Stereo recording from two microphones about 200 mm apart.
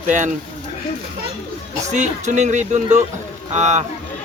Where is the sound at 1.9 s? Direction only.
35° right (ahead or behind).